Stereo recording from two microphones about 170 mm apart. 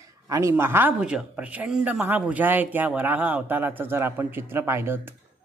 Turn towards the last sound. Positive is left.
turn(degrees=-15)  # may be behind; listen again after turning